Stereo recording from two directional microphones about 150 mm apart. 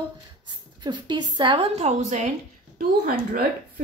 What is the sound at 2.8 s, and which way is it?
Speech, 75° right (ahead or behind).